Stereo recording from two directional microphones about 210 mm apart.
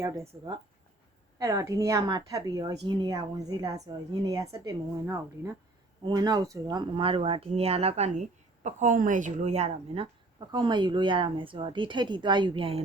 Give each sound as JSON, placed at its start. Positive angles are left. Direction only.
{"t": 0.0, "sound": "a woman's voice", "side_deg": -15}